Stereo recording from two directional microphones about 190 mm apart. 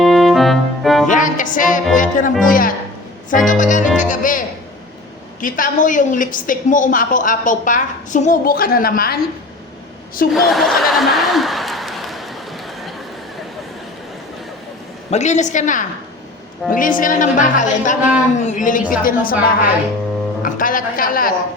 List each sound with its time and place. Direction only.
0.0 s music: centre (ahead or behind)
1.0 s music: 40° left (ahead or behind)
2.4 s a woman's voice: 45° left (ahead or behind)
3.2 s music: 45° left (ahead or behind)
3.6 s a woman's voice: 40° left (ahead or behind)
10.3 s a sound: centre (ahead or behind)
15.1 s a woman's voice: 35° left (ahead or behind)